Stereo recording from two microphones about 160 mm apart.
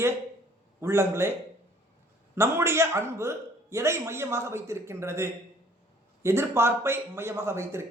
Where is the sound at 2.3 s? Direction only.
15° right (ahead or behind).